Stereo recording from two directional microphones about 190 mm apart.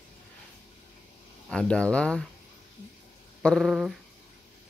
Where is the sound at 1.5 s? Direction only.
5° left (ahead or behind).